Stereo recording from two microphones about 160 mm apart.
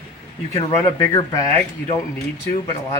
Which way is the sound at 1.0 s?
25° left (ahead or behind).